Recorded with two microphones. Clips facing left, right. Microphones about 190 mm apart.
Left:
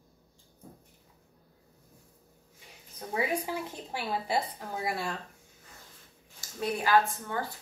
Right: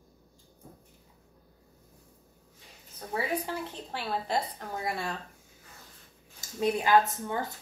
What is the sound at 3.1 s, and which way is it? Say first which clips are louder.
A woman's voice: left 1 dB; 10° left (ahead or behind).